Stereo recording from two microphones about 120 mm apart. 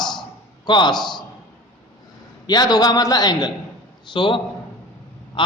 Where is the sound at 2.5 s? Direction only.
35° left (ahead or behind).